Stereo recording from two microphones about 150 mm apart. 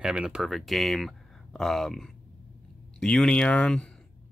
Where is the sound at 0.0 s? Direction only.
5° right (ahead or behind).